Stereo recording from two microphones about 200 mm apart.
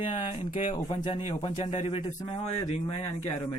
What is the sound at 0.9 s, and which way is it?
Speech, 25° left (ahead or behind).